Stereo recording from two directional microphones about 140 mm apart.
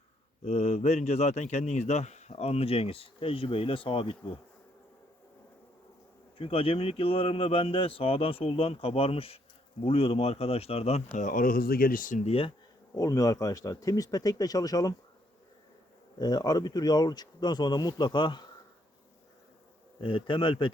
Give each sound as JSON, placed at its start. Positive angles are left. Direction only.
{"t": 0.4, "sound": "a man's voice", "side_deg": 50}
{"t": 6.4, "sound": "a man's voice", "side_deg": 40}
{"t": 11.2, "sound": "speech", "side_deg": 75}
{"t": 12.2, "sound": "a man's voice", "side_deg": 45}
{"t": 12.9, "sound": "speech", "side_deg": 25}
{"t": 16.1, "sound": "speech", "side_deg": 30}
{"t": 20.0, "sound": "speech", "side_deg": 40}